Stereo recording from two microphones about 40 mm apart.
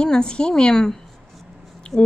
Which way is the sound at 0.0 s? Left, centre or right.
Left.